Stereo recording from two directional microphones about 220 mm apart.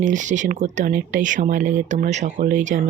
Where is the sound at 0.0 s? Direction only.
35° right (ahead or behind).